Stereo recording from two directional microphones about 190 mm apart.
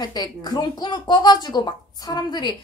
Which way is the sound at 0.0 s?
20° left (ahead or behind).